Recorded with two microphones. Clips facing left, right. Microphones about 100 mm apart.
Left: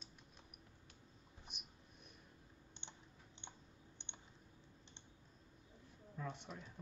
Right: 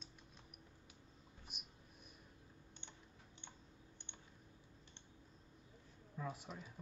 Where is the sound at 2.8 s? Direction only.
20° left (ahead or behind).